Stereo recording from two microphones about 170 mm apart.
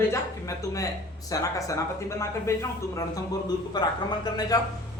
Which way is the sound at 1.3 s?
20° left (ahead or behind).